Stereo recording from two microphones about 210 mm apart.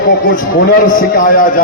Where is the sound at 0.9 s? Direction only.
40° left (ahead or behind).